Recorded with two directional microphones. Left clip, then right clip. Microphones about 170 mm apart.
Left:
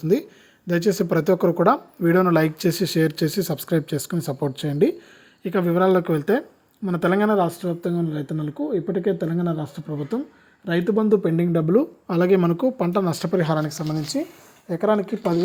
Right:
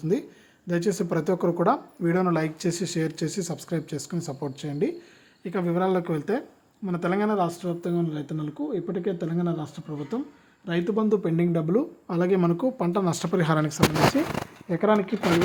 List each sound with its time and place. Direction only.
0.0 s speech: 25° left (ahead or behind); by 13.8 s 5° right (ahead or behind)
14.7 s speech: 15° left (ahead or behind)